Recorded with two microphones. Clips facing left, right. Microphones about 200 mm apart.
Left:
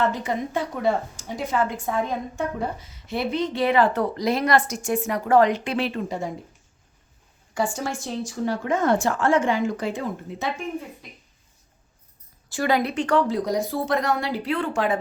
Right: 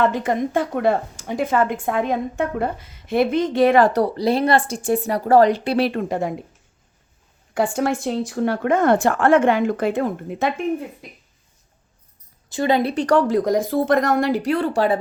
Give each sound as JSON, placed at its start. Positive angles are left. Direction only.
{"t": 0.0, "sound": "a woman's voice", "side_deg": -55}
{"t": 5.9, "sound": "a woman's voice", "side_deg": -60}
{"t": 7.5, "sound": "a woman's voice", "side_deg": -60}
{"t": 12.5, "sound": "a woman's voice", "side_deg": -20}
{"t": 12.9, "sound": "speech", "side_deg": -40}